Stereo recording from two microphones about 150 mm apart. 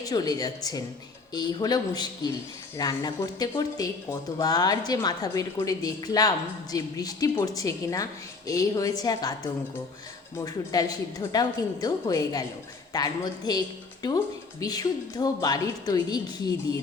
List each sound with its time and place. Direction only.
0.0 s a woman's voice: 25° left (ahead or behind)